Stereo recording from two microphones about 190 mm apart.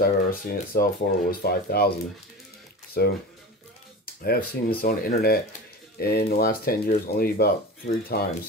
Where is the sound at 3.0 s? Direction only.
55° left (ahead or behind).